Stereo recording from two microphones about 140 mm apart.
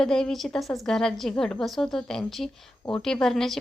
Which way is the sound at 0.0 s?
5° left (ahead or behind).